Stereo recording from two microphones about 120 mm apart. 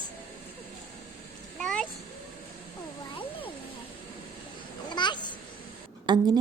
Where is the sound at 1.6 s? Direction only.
5° left (ahead or behind).